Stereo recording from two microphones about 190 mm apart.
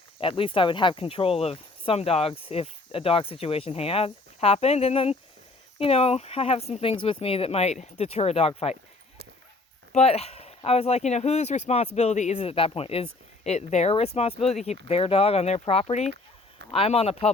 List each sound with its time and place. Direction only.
0.2 s speech: 30° left (ahead or behind)
9.9 s speech: 35° left (ahead or behind)